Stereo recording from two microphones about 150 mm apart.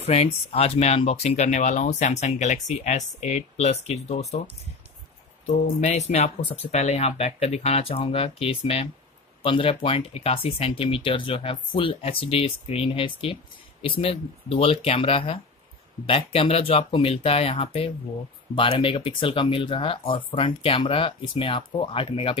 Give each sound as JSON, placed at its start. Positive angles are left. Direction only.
{"t": 0.0, "sound": "speech", "side_deg": 45}
{"t": 5.5, "sound": "speech", "side_deg": 50}